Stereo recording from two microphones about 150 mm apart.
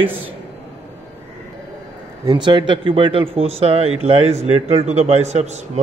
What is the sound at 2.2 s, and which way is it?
A man's voice, 30° right (ahead or behind).